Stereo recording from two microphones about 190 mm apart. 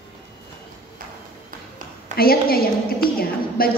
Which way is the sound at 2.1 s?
50° left (ahead or behind).